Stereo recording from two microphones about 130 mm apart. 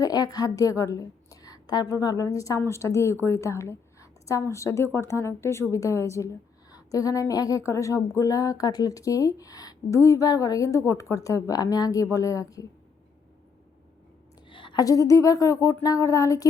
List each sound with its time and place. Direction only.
0.0 s a woman's voice: 30° left (ahead or behind)
14.5 s a woman's voice: 40° left (ahead or behind)